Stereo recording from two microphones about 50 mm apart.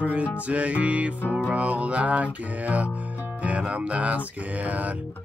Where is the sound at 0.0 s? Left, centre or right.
Right.